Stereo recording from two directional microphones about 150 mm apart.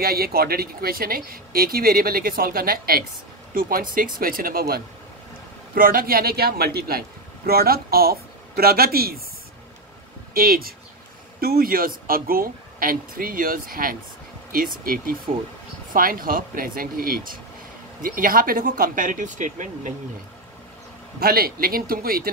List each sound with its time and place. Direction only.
0.0 s speech: 90° right
3.5 s speech: 75° right (ahead or behind); by 9.2 s 90° right
10.3 s speech: 80° right; by 19.9 s 60° right (ahead or behind)
21.2 s speech: 90° right